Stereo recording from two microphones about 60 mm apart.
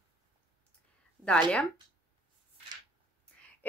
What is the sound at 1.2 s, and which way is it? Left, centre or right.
Speech, centre.